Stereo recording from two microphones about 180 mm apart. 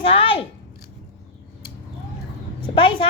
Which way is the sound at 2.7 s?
30° left (ahead or behind).